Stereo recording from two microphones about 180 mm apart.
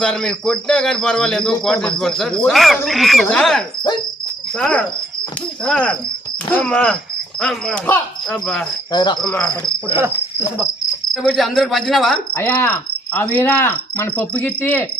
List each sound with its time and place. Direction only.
0.0 s speech: 5° left (ahead or behind)
6.5 s cricket: 5° left (ahead or behind)
7.3 s speech: 5° left (ahead or behind)
8.9 s cricket: 25° left (ahead or behind)
9.2 s speech: 5° left (ahead or behind)
9.5 s cricket: 25° left (ahead or behind)
11.1 s speech: centre (ahead or behind)
12.3 s cricket: 10° left (ahead or behind)